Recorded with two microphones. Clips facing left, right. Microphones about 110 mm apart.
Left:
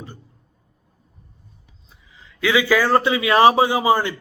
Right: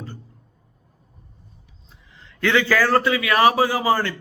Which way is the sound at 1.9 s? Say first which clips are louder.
Even; centre (ahead or behind).